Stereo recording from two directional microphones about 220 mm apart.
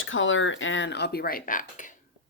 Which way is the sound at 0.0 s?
60° left (ahead or behind).